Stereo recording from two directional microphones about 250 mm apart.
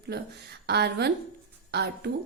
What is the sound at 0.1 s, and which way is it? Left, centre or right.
A woman's voice, right.